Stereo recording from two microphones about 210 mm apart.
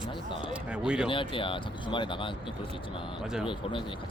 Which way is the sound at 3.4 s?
25° left (ahead or behind).